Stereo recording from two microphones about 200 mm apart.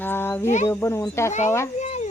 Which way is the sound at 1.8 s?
35° left (ahead or behind).